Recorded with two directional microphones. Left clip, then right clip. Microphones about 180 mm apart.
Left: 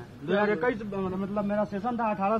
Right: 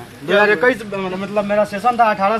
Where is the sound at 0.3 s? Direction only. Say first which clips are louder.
Right 13 dB; 45° right (ahead or behind).